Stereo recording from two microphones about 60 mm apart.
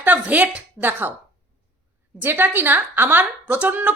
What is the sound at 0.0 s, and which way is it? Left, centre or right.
A woman's voice, right.